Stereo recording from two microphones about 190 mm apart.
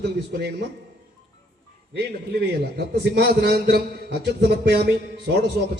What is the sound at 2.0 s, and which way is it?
A man's voice, 60° right (ahead or behind).